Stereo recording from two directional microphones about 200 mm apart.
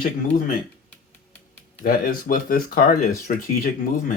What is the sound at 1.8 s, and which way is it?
Speech, 45° left (ahead or behind).